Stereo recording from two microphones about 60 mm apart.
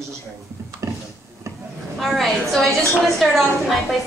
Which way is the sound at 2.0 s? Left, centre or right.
Centre.